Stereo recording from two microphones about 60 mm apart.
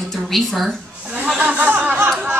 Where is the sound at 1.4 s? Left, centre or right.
Right.